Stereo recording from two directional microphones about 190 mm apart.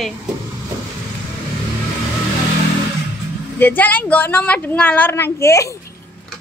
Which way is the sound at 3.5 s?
10° left (ahead or behind).